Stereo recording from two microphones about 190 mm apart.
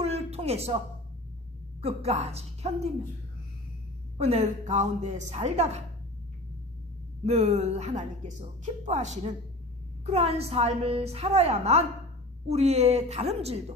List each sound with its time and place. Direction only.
0.0 s a sound: 35° right (ahead or behind)
1.8 s a woman's voice: 35° right (ahead or behind)
4.2 s a woman's voice: 35° right (ahead or behind)
7.3 s a woman's voice: 35° right (ahead or behind)